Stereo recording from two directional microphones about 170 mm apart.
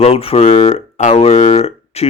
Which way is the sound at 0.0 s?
35° left (ahead or behind).